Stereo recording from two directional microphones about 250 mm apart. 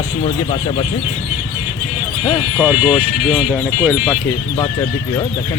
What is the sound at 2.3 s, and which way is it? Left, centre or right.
Speech, centre.